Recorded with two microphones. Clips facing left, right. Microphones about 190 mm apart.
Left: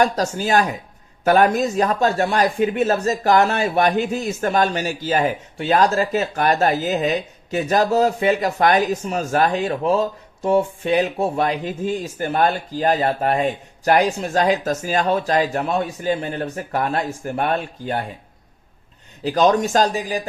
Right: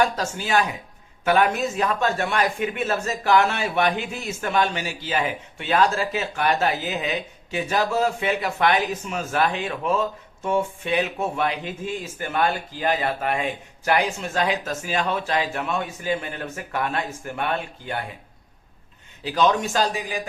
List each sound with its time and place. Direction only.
0.0 s speech: 40° left (ahead or behind)
19.2 s speech: 45° left (ahead or behind)